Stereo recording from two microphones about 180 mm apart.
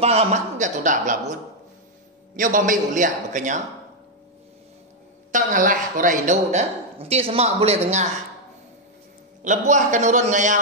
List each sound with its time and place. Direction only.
0.0 s a woman's voice: 35° right (ahead or behind)
5.3 s a woman's voice: 45° right (ahead or behind)
9.4 s a man's voice: 45° right (ahead or behind)